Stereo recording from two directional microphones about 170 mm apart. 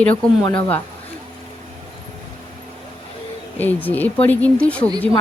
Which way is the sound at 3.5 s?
10° left (ahead or behind).